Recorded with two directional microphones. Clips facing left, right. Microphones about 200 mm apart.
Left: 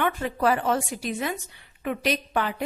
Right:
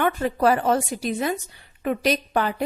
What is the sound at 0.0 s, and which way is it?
A woman's voice, 40° right (ahead or behind).